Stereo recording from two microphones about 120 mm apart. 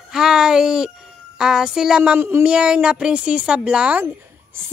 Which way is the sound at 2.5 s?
5° right (ahead or behind).